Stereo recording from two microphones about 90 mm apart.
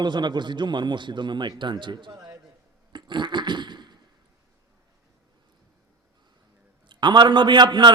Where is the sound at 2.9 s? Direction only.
60° right (ahead or behind).